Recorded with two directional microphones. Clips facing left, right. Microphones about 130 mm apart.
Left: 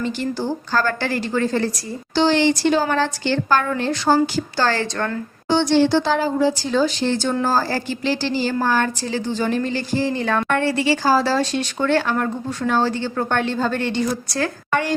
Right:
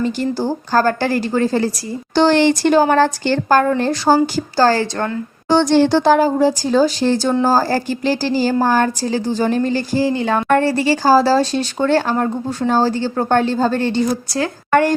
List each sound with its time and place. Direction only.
0.0 s speech: 40° right (ahead or behind)
2.1 s speech: 50° right (ahead or behind)
5.5 s speech: 45° right (ahead or behind); by 14.5 s 30° right (ahead or behind)
14.7 s a woman's voice: 50° right (ahead or behind)